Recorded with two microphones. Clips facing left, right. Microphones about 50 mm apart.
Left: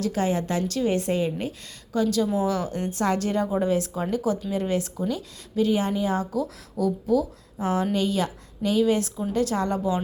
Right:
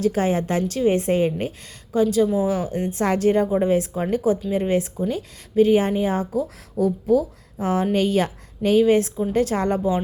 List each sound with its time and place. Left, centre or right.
0.0 s a woman's voice: right